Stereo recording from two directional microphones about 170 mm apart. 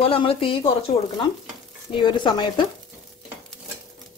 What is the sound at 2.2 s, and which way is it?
Speech, 30° left (ahead or behind).